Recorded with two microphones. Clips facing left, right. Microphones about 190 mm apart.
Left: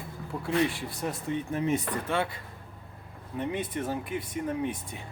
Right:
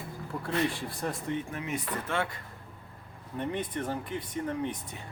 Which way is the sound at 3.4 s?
10° left (ahead or behind).